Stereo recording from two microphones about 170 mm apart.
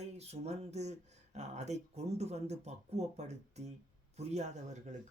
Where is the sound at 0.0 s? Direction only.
40° right (ahead or behind).